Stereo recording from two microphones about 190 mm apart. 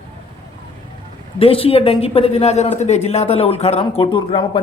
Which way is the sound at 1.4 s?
30° left (ahead or behind).